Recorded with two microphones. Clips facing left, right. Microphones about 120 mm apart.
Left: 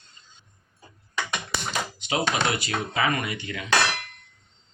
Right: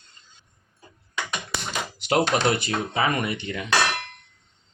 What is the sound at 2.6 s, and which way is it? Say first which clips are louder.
Speech: right 1 dB; 35° right (ahead or behind).